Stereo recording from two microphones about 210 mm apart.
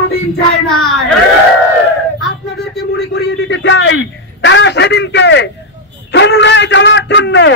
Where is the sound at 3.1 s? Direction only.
55° left (ahead or behind).